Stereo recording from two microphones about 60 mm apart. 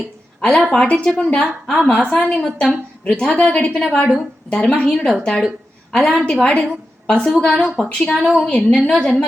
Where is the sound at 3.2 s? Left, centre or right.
Centre.